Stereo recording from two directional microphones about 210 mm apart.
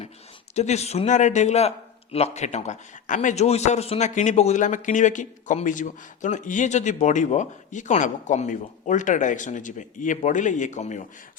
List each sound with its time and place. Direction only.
0.5 s a man's voice: 30° left (ahead or behind)